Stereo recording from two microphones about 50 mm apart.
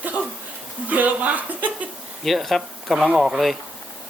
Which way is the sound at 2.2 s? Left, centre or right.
Centre.